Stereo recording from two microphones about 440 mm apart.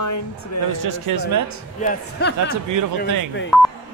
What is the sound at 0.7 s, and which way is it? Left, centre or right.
Speech, right.